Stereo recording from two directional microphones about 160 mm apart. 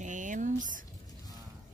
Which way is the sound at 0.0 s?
50° right (ahead or behind).